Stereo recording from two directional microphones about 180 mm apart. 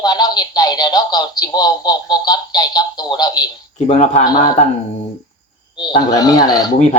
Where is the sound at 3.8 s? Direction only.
40° left (ahead or behind).